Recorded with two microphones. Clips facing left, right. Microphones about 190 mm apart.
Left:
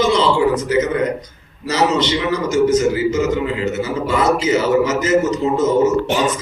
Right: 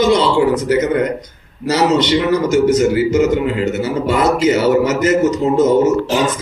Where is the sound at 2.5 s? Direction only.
65° right (ahead or behind).